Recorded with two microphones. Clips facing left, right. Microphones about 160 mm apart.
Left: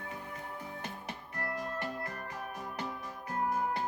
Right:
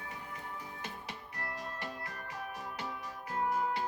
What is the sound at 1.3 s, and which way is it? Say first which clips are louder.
Music: left 6 dB; 50° left (ahead or behind).